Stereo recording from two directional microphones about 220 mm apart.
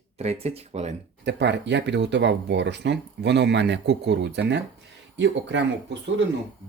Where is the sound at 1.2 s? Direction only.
50° right (ahead or behind).